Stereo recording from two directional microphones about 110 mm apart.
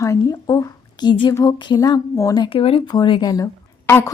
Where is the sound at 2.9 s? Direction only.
45° left (ahead or behind).